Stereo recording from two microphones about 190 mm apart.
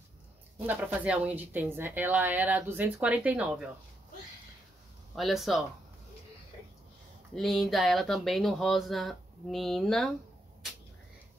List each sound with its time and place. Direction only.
0.7 s a woman's voice: 10° right (ahead or behind)
5.1 s speech: centre (ahead or behind)
7.3 s speech: centre (ahead or behind)